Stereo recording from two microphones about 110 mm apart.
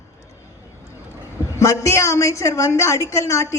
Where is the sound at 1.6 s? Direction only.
25° left (ahead or behind).